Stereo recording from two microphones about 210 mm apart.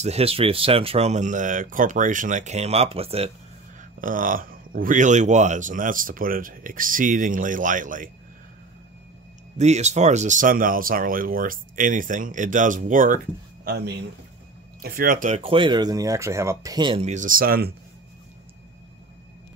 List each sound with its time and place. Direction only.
0.0 s speech: 30° right (ahead or behind)
4.0 s speech: 40° right (ahead or behind)
9.6 s speech: 30° right (ahead or behind)
13.7 s a man's voice: 50° right (ahead or behind)